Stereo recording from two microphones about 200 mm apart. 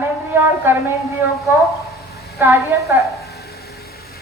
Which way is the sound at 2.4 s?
10° right (ahead or behind).